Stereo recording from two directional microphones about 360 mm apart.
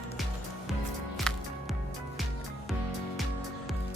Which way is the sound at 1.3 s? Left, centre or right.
Centre.